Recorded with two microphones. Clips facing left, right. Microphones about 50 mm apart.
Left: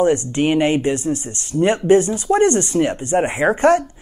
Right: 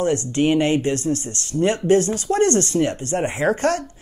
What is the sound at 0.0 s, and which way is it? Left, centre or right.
Speech, left.